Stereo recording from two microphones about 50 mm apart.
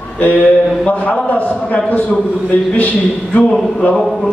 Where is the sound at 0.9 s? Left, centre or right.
Left.